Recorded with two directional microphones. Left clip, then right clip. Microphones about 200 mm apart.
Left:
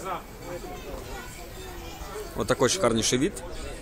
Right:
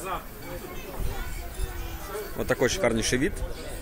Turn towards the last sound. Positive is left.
turn(degrees=20)  # may be behind; listen again after turning